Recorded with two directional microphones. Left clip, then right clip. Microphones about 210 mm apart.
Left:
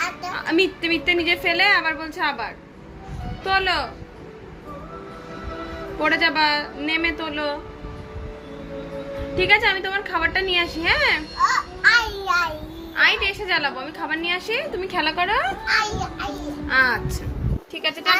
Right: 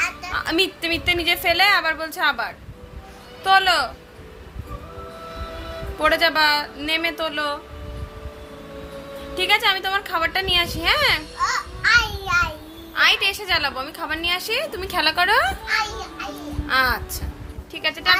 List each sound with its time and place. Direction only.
0.3 s a woman's voice: 25° right (ahead or behind)
6.0 s a woman's voice: 25° right (ahead or behind)
9.3 s a woman's voice: 25° right (ahead or behind)
11.3 s babbling: 15° right (ahead or behind)
12.9 s a woman's voice: 25° right (ahead or behind)
16.6 s a woman's voice: 25° right (ahead or behind)